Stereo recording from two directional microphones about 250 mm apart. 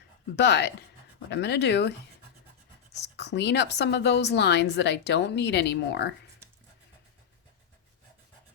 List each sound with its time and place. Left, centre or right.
0.3 s speech: left
2.9 s speech: left